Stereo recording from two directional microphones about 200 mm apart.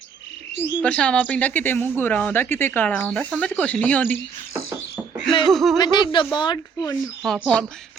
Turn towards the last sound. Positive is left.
turn(degrees=5)  # may be behind; listen again after turning